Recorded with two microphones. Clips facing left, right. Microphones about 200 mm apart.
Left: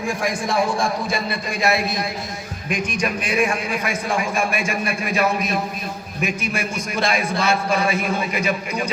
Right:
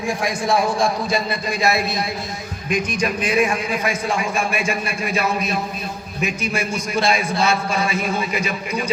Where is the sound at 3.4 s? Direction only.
50° left (ahead or behind).